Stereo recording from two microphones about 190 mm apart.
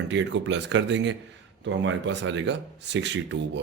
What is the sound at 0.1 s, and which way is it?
A man's voice, 70° right (ahead or behind).